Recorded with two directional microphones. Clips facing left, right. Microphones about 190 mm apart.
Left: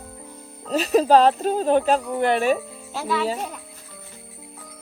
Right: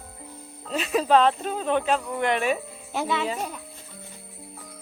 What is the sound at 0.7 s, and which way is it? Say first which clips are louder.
Speech: left 5 dB; 40° left (ahead or behind).